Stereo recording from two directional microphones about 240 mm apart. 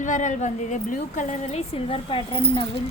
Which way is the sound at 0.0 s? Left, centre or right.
Left.